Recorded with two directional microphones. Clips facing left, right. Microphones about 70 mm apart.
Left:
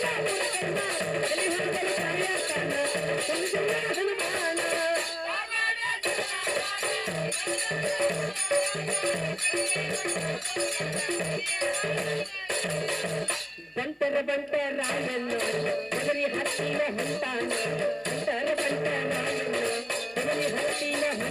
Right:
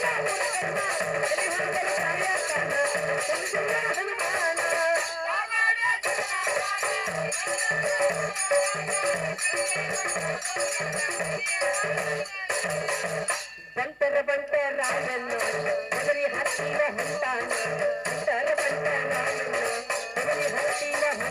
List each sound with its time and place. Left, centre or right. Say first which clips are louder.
0.0 s music: right 2 dB; centre
11.6 s speech: right 2 dB; centre
14.0 s music: right 3 dB; right
14.9 s speech: right 1 dB; centre
18.3 s music: right 3 dB; right